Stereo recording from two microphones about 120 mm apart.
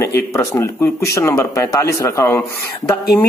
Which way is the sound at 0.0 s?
25° left (ahead or behind).